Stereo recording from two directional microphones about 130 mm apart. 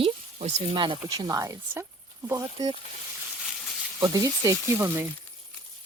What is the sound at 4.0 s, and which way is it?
Speech, 25° right (ahead or behind).